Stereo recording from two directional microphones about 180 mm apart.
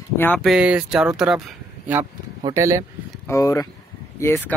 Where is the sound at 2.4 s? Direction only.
20° right (ahead or behind).